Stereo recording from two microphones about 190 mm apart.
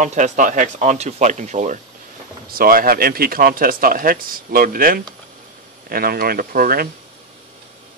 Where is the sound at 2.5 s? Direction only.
50° right (ahead or behind).